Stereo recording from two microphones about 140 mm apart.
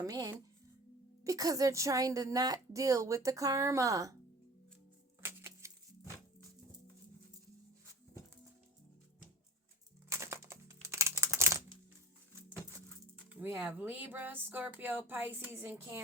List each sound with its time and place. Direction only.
0.0 s a woman's voice: 25° right (ahead or behind)
5.2 s music: 20° right (ahead or behind)
10.1 s a sound: 20° right (ahead or behind)
13.3 s speech: 10° right (ahead or behind)